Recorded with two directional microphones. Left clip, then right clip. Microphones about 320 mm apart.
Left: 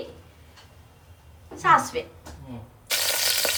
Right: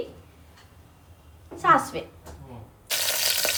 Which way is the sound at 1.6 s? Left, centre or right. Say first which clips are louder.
Left 1 dB; centre.